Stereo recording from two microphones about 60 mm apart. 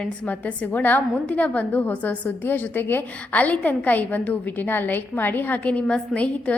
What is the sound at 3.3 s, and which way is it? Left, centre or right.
A woman's voice, left.